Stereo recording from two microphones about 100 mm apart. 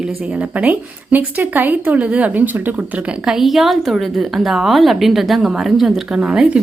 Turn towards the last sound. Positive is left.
turn(degrees=-10)  # may be behind; listen again after turning